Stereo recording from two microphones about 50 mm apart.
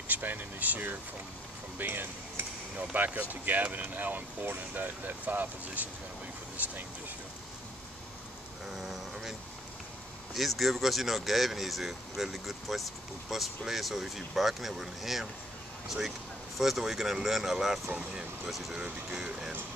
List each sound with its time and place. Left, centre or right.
0.1 s speech: right
1.8 s speech: right
2.9 s speech: right
8.7 s speech: centre
10.3 s speech: centre
16.5 s speech: centre